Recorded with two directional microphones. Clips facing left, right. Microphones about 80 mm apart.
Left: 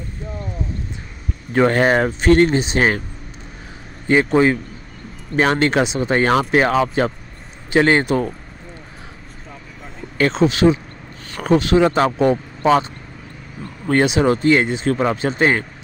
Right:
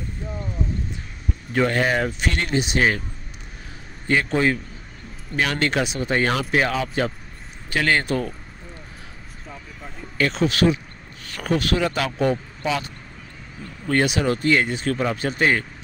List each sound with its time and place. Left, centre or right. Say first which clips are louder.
1.5 s speech: left 6 dB; left
4.1 s speech: left 6 dB; left
5.3 s speech: left 6 dB; left
7.7 s speech: left 6 dB; left
10.1 s speech: left 5 dB; left
13.8 s speech: left 5 dB; left